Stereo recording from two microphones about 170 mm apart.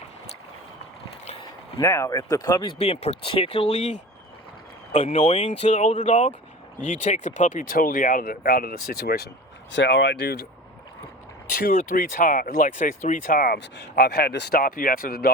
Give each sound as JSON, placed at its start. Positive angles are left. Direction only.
{"t": 1.8, "sound": "speech", "side_deg": 20}
{"t": 2.7, "sound": "speech", "side_deg": 35}
{"t": 4.9, "sound": "speech", "side_deg": 40}
{"t": 9.7, "sound": "speech", "side_deg": 90}
{"t": 11.6, "sound": "speech", "side_deg": 55}